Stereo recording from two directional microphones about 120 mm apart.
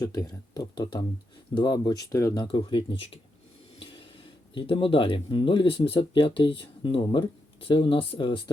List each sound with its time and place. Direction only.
0.0 s speech: 25° left (ahead or behind); by 8.4 s 45° left (ahead or behind)